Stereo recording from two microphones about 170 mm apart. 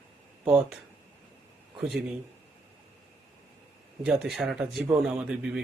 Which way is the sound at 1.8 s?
5° right (ahead or behind).